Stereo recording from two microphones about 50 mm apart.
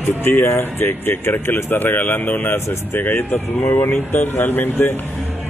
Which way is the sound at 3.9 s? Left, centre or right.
Left.